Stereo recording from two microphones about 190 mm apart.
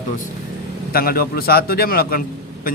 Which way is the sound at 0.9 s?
50° left (ahead or behind).